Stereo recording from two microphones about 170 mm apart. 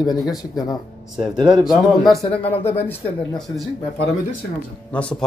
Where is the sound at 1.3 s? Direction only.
25° right (ahead or behind).